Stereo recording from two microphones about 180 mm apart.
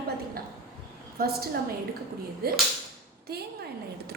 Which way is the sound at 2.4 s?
60° right (ahead or behind).